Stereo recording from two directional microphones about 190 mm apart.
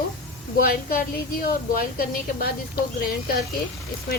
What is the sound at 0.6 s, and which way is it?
A woman's voice, 50° left (ahead or behind).